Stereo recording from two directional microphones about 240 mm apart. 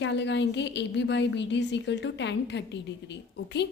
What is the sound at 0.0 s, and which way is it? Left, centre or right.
A woman's voice, left.